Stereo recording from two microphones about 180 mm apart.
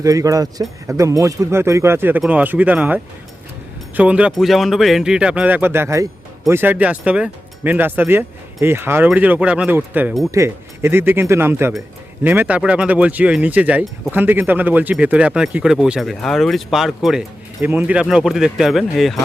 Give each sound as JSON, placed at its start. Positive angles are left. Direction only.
{"t": 0.0, "sound": "speech", "side_deg": -20}